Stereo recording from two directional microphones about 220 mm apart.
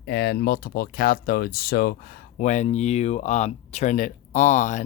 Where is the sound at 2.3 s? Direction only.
35° left (ahead or behind).